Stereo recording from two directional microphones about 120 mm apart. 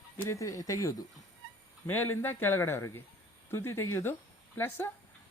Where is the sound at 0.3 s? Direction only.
25° left (ahead or behind).